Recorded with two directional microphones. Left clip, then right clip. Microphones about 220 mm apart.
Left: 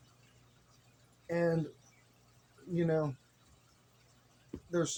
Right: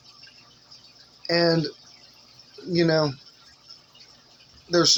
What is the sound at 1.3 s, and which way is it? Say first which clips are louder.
Speech: right 11 dB; 15° right (ahead or behind).